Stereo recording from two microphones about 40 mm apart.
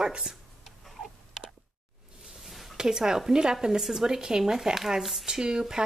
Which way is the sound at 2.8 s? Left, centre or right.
Centre.